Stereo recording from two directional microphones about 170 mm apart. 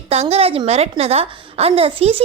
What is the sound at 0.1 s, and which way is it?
A woman's voice, 40° right (ahead or behind).